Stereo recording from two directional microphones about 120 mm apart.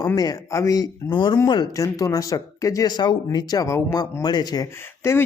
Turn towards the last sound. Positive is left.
turn(degrees=20)  # may be behind; listen again after turning